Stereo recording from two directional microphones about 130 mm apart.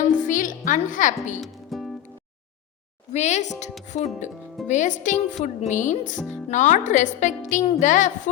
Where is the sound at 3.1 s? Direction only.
65° left (ahead or behind).